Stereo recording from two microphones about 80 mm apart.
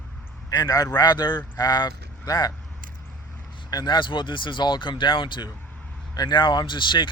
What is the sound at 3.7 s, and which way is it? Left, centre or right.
Speech, left.